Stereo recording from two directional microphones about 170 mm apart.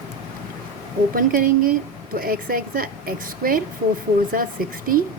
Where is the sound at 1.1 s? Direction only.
55° right (ahead or behind).